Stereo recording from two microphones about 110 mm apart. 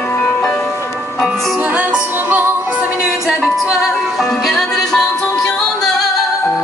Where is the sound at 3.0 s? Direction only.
5° right (ahead or behind).